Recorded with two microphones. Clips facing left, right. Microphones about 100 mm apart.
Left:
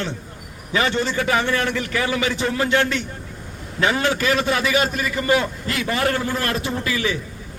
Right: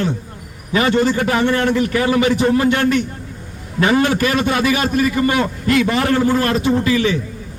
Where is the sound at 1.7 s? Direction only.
25° right (ahead or behind).